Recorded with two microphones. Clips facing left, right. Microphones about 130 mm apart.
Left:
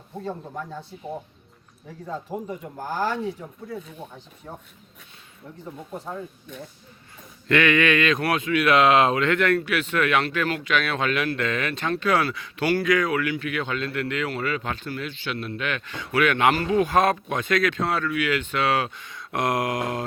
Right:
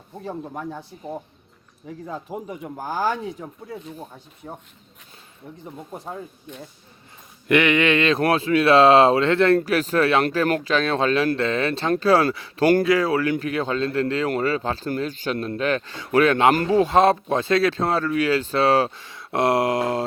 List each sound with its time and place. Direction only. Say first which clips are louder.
0.3 s speech: right 3 dB; 15° right (ahead or behind)
2.5 s speech: right 1 dB; 15° right (ahead or behind)
4.4 s speech: right 3 dB; 20° right (ahead or behind)
7.4 s speech: right 2 dB; 20° right (ahead or behind)